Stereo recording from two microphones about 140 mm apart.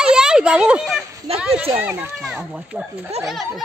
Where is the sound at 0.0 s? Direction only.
5° right (ahead or behind).